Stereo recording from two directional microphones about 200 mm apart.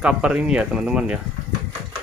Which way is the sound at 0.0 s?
5° right (ahead or behind).